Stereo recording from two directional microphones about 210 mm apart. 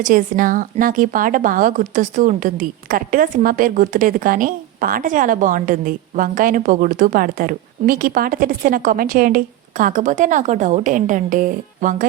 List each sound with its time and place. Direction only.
0.0 s a woman's voice: 40° right (ahead or behind)